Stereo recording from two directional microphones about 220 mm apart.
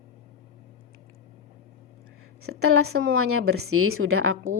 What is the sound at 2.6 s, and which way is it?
A woman's voice, 75° right (ahead or behind).